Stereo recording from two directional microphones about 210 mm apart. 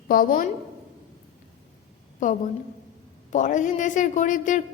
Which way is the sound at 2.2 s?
35° left (ahead or behind).